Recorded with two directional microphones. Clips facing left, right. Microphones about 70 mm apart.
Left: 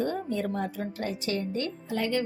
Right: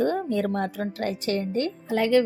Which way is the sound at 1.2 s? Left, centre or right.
Right.